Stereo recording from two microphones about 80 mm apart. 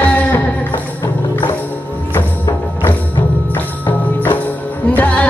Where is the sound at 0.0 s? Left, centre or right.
Left.